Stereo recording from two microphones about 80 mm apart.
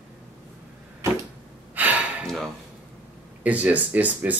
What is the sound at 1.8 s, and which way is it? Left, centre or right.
Gasp, right.